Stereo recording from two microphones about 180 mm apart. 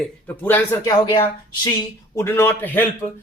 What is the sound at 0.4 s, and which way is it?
Speech, 10° left (ahead or behind).